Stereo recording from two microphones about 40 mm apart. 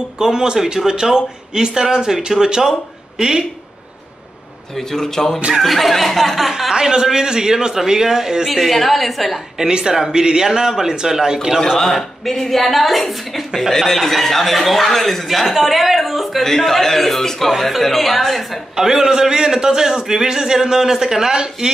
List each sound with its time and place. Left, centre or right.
0.2 s a man's voice: centre
4.7 s a man's voice: centre
6.7 s a man's voice: centre
8.5 s speech: centre
9.6 s a man's voice: centre
11.8 s speech: centre
16.4 s a man's voice: centre
18.8 s a man's voice: centre